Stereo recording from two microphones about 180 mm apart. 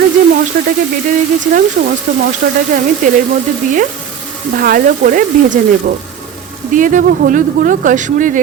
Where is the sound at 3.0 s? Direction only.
45° right (ahead or behind).